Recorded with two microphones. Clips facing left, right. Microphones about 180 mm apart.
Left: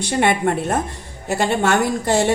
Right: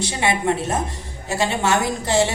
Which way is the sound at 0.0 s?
55° left (ahead or behind).